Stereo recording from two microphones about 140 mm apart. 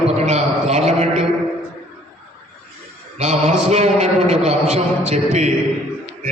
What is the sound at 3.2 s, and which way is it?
A man's voice, 55° right (ahead or behind).